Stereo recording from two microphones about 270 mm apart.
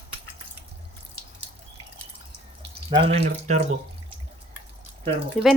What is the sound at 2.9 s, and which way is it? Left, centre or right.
Speech, centre.